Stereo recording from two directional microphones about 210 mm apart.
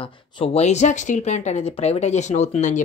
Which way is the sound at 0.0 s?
25° left (ahead or behind).